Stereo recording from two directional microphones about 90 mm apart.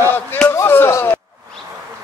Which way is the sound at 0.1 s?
20° left (ahead or behind).